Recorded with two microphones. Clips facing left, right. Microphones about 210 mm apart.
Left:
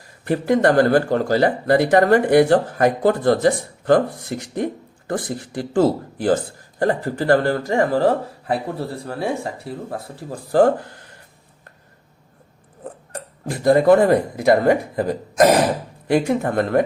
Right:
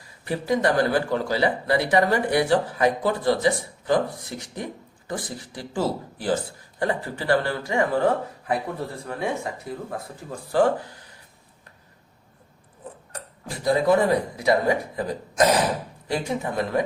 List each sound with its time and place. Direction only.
0.3 s speech: 55° left (ahead or behind); by 10.7 s 40° left (ahead or behind)
13.1 s speech: 50° left (ahead or behind)